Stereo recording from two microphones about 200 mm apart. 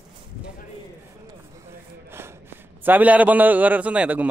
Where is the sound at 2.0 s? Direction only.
10° right (ahead or behind).